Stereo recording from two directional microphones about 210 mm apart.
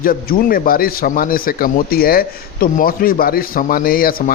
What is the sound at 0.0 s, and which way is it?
A man's voice, 45° left (ahead or behind).